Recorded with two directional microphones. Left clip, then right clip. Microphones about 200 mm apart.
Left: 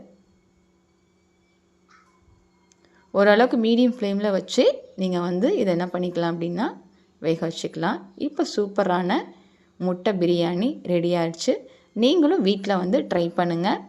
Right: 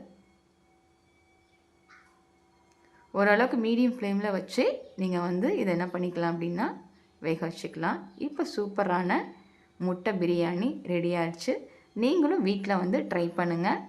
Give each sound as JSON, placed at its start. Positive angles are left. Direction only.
{"t": 3.1, "sound": "a woman's voice", "side_deg": 25}